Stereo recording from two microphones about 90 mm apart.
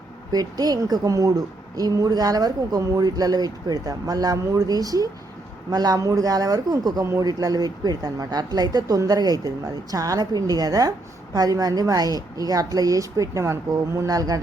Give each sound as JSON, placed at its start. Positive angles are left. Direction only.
{"t": 0.3, "sound": "a woman's voice", "side_deg": -45}